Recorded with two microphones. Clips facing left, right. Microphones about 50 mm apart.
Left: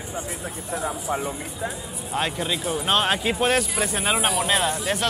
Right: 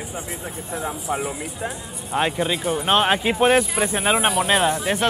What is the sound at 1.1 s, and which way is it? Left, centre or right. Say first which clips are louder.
Speech: right 2 dB; centre.